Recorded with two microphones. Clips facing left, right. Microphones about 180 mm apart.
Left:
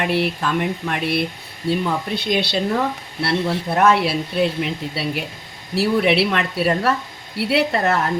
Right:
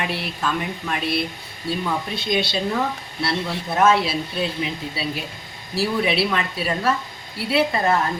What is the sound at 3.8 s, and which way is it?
A woman's voice, 65° left (ahead or behind).